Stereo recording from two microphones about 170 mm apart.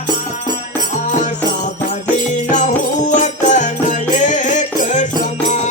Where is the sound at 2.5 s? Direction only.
45° left (ahead or behind).